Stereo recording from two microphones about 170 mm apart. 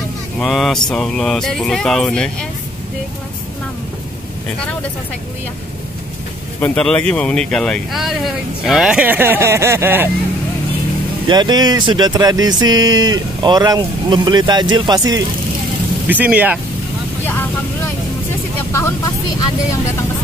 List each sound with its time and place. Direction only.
0.4 s speech: centre (ahead or behind)
6.6 s speech: 5° left (ahead or behind); by 10.0 s 15° right (ahead or behind)
11.2 s speech: 25° right (ahead or behind)
16.1 s speech: 10° right (ahead or behind)
18.7 s speech: 15° left (ahead or behind)